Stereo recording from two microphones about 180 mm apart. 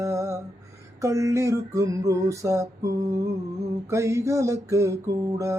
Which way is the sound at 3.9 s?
15° right (ahead or behind).